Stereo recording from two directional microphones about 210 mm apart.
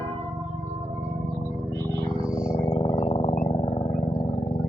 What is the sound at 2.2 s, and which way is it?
Purr, 5° right (ahead or behind).